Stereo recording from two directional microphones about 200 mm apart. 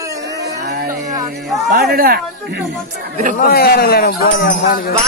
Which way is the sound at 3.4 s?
50° left (ahead or behind).